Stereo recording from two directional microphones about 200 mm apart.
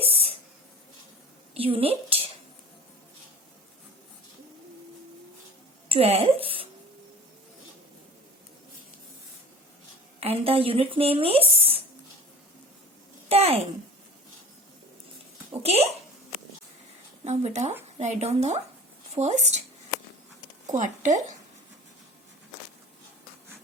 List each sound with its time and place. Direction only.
0.0 s a sound: 30° right (ahead or behind)
1.5 s speech: 30° right (ahead or behind)
5.9 s speech: 30° right (ahead or behind)
10.2 s speech: 30° right (ahead or behind)
13.2 s a sound: 30° right (ahead or behind)
15.6 s speech: 30° right (ahead or behind)
17.2 s speech: 35° right (ahead or behind)
20.7 s speech: 40° right (ahead or behind)